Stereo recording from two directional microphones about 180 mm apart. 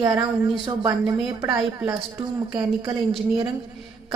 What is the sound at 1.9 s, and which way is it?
Speech, 20° right (ahead or behind).